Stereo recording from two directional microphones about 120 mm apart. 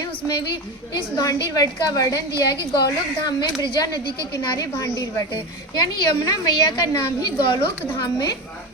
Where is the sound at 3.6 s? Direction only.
35° left (ahead or behind).